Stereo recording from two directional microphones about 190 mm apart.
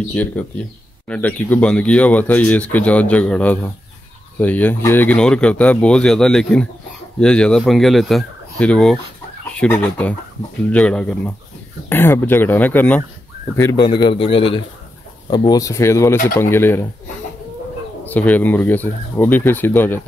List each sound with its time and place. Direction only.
0.1 s speech: 5° left (ahead or behind)
13.6 s a man's voice: 20° left (ahead or behind)
18.0 s speech: 10° left (ahead or behind)